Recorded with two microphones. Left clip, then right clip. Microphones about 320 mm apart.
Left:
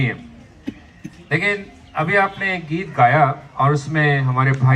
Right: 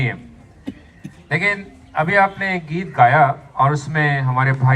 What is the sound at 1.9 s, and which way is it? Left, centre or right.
A man's voice, right.